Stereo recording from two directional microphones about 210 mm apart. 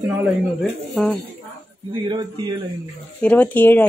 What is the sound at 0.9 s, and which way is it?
Speech, centre (ahead or behind).